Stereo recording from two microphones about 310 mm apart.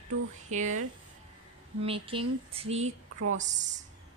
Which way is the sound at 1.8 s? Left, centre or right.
Centre.